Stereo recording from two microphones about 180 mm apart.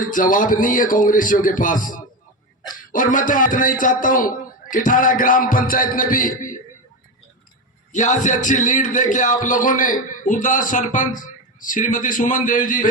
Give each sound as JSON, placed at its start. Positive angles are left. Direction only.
{"t": 0.0, "sound": "a man's voice", "side_deg": 50}
{"t": 7.9, "sound": "a man's voice", "side_deg": 45}